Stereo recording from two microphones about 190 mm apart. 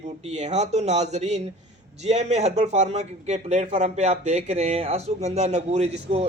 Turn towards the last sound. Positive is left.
turn(degrees=-35)  # may be behind; listen again after turning